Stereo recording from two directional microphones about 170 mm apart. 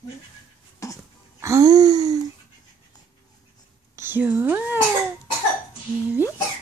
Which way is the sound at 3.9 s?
15° right (ahead or behind).